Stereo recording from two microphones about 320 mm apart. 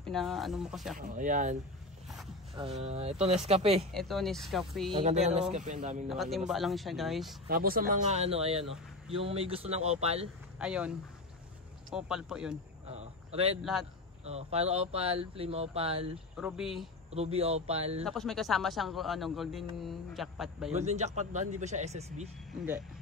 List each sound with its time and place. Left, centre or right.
0.0 s speech: centre
0.9 s speech: right
3.9 s speech: centre
4.9 s speech: centre
6.0 s speech: centre
7.4 s speech: right
10.6 s speech: centre
12.8 s a sound: centre
14.2 s speech: centre
16.3 s speech: centre
17.1 s speech: centre
18.0 s speech: centre
20.7 s speech: right